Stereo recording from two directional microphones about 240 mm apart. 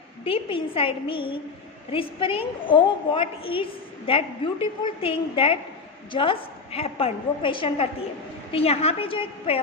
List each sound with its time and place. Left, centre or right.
0.3 s a woman's voice: left